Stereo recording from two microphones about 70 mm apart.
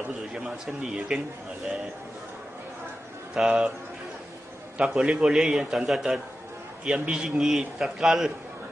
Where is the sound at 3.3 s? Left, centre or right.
Centre.